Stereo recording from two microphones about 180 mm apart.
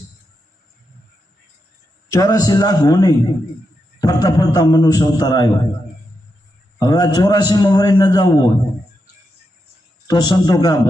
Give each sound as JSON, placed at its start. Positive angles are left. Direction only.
{"t": 2.0, "sound": "a man's voice", "side_deg": 20}
{"t": 6.7, "sound": "a man's voice", "side_deg": 20}
{"t": 10.1, "sound": "a man's voice", "side_deg": 20}